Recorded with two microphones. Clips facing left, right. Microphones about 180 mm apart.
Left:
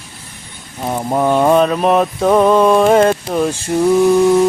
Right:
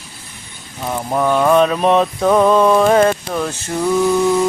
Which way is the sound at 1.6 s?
Centre (ahead or behind).